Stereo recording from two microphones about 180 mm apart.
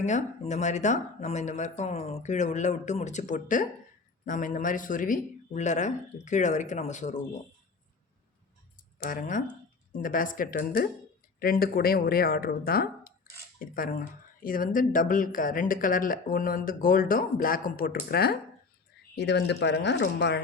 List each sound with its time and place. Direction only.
0.0 s speech: 40° left (ahead or behind)
9.0 s speech: 50° left (ahead or behind)
19.1 s speech: 70° left (ahead or behind)